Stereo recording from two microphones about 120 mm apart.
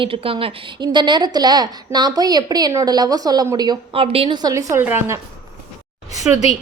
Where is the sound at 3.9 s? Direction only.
50° right (ahead or behind).